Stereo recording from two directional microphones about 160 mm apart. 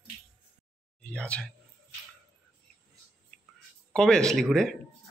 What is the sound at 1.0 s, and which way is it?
Speech, 10° left (ahead or behind).